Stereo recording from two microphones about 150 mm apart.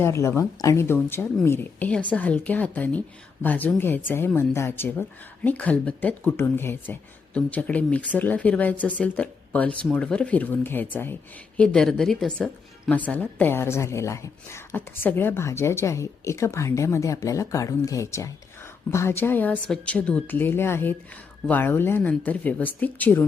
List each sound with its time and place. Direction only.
0.0 s speech: 20° left (ahead or behind)